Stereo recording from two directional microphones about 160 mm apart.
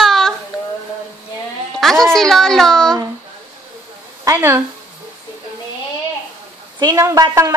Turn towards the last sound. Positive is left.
turn(degrees=-20)  # may be behind; listen again after turning